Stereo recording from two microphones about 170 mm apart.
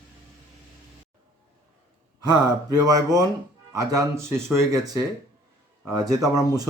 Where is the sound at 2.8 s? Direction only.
20° right (ahead or behind).